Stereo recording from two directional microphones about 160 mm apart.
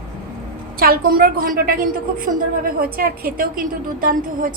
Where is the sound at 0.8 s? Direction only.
65° right (ahead or behind).